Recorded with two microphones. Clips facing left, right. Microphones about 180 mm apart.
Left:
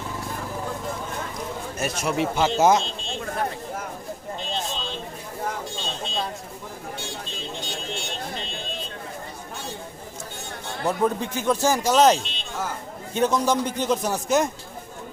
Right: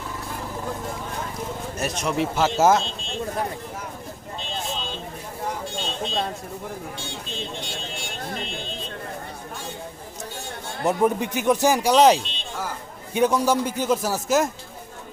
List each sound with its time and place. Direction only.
1.8 s speech: centre (ahead or behind)
10.8 s speech: 15° right (ahead or behind)